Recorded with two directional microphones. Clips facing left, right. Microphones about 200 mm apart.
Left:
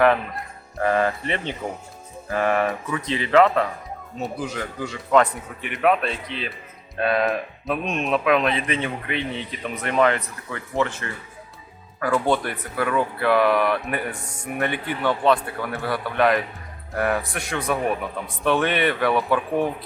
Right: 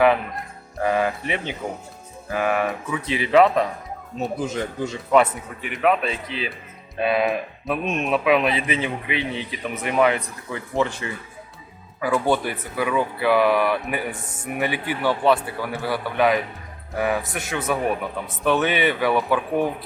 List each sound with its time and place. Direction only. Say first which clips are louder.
0.8 s speech: even; 5° right (ahead or behind); by 4.9 s 25° right (ahead or behind)
5.1 s speech: even; 5° right (ahead or behind)